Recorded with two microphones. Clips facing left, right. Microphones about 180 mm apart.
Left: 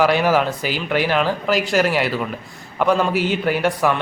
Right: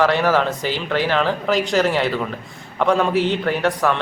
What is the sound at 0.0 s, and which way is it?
Speech, 10° left (ahead or behind).